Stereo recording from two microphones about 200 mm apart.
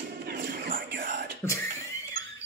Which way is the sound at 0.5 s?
45° right (ahead or behind).